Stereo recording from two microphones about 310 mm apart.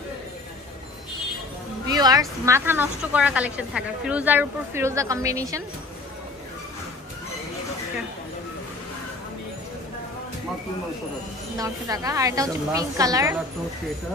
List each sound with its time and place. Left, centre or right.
1.9 s a woman's voice: centre
11.5 s a woman's voice: centre